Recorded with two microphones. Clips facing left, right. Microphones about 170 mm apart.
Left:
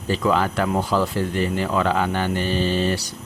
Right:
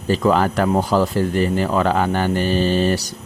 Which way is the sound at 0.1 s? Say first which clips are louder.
Right 4 dB; 45° right (ahead or behind).